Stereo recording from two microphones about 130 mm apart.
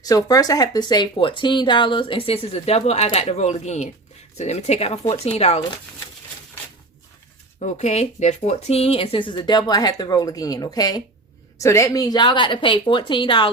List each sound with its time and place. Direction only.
0.0 s a woman's voice: 30° left (ahead or behind); by 5.6 s 55° left (ahead or behind)
7.6 s speech: 60° left (ahead or behind); by 13.5 s 40° left (ahead or behind)